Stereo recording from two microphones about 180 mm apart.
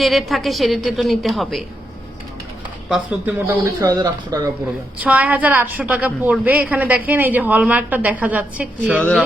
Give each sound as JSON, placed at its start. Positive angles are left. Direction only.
{"t": 0.0, "sound": "a woman's voice", "side_deg": 0}
{"t": 2.9, "sound": "a woman's voice", "side_deg": -5}
{"t": 4.9, "sound": "a woman's voice", "side_deg": -10}
{"t": 9.0, "sound": "speech", "side_deg": 5}